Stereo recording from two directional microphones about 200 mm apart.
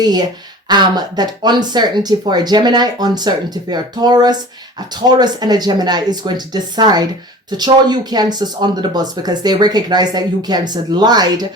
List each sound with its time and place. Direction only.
0.0 s speech: 20° right (ahead or behind)